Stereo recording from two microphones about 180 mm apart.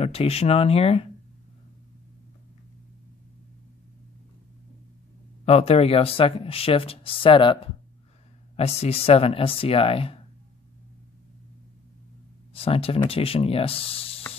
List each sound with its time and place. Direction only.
0.0 s speech: 35° left (ahead or behind)
5.4 s speech: 35° left (ahead or behind)
12.5 s speech: 30° left (ahead or behind)